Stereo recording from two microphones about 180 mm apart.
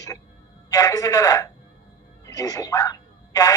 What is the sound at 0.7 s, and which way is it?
Speech, 20° left (ahead or behind).